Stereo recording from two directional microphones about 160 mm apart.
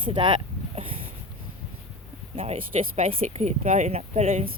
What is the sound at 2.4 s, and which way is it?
Speech, 40° right (ahead or behind).